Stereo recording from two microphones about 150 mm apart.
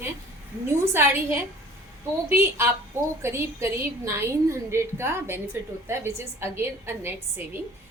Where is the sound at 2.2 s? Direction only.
15° right (ahead or behind).